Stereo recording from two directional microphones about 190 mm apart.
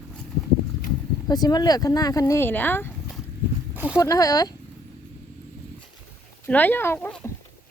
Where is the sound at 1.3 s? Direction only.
20° left (ahead or behind).